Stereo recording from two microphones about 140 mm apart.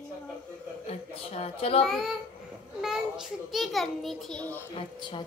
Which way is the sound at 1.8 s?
Centre (ahead or behind).